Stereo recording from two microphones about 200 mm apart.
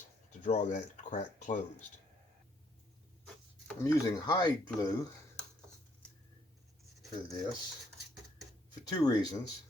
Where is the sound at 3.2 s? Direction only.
5° left (ahead or behind).